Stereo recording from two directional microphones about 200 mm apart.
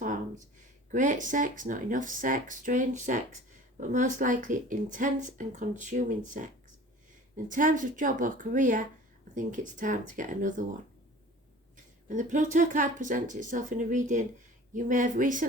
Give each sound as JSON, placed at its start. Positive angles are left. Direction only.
{"t": 0.0, "sound": "a sound", "side_deg": -40}
{"t": 0.9, "sound": "speech", "side_deg": -40}
{"t": 12.0, "sound": "speech", "side_deg": -40}